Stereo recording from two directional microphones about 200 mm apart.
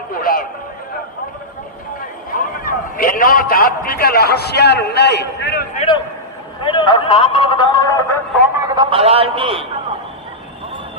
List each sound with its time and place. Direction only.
0.1 s a sound: 45° left (ahead or behind)
2.3 s a man's voice: 45° left (ahead or behind)
5.7 s a man's voice: 30° left (ahead or behind)
8.6 s a man's voice: 20° right (ahead or behind)